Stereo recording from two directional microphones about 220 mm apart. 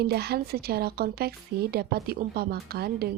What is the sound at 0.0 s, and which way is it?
Speech, 45° right (ahead or behind).